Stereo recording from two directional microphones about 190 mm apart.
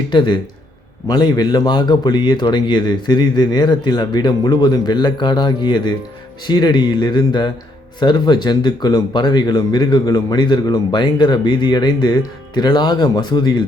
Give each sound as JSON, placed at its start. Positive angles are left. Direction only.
{"t": 0.1, "sound": "speech", "side_deg": 25}